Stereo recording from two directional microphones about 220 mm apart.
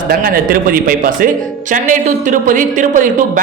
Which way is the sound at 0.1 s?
40° right (ahead or behind).